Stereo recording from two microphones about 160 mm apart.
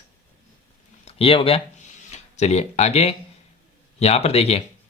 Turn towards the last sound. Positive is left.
turn(degrees=40)  # may be behind; listen again after turning